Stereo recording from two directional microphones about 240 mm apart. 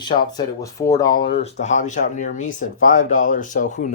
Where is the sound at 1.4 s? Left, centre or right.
Left.